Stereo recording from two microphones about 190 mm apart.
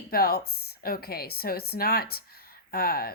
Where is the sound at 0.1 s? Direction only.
55° left (ahead or behind).